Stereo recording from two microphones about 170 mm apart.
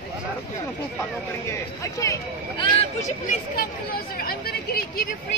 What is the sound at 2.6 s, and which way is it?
Speech, 40° left (ahead or behind).